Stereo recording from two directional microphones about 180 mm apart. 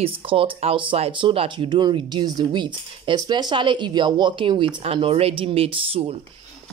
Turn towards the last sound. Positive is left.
turn(degrees=-35)  # may be behind; listen again after turning